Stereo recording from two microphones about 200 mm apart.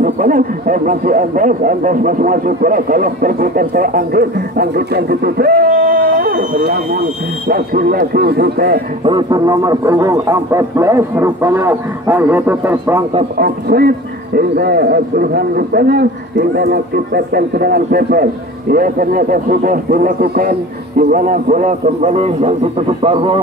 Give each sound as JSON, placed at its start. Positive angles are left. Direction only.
{"t": 0.0, "sound": "a man's voice", "side_deg": -40}
{"t": 9.0, "sound": "a man's voice", "side_deg": -20}
{"t": 13.4, "sound": "a man's voice", "side_deg": -50}